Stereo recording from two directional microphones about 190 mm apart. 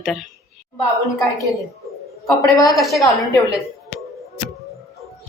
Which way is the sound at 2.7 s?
Centre (ahead or behind).